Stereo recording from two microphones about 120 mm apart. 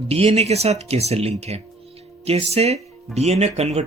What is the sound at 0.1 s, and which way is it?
Speech, 60° right (ahead or behind).